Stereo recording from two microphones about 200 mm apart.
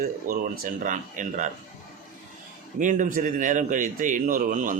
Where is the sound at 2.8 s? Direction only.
40° right (ahead or behind).